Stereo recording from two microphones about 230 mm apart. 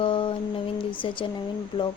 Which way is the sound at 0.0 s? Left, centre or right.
Left.